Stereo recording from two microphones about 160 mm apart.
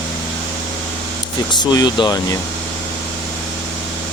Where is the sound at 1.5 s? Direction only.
25° left (ahead or behind).